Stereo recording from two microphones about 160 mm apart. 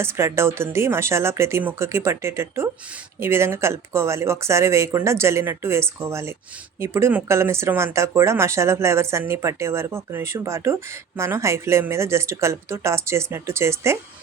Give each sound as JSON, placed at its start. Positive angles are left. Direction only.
{"t": 0.0, "sound": "speech", "side_deg": -15}